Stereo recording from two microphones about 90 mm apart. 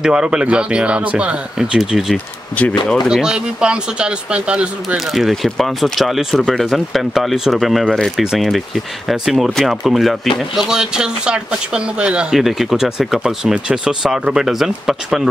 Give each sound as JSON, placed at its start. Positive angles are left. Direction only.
{"t": 0.0, "sound": "speech", "side_deg": -10}
{"t": 2.6, "sound": "speech", "side_deg": 15}
{"t": 3.1, "sound": "speech", "side_deg": -10}
{"t": 4.9, "sound": "speech", "side_deg": 0}